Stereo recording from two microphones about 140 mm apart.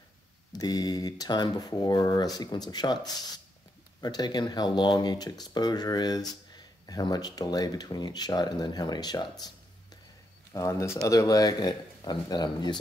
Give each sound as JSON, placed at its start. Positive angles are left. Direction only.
{"t": 0.5, "sound": "speech", "side_deg": 30}
{"t": 10.5, "sound": "speech", "side_deg": 20}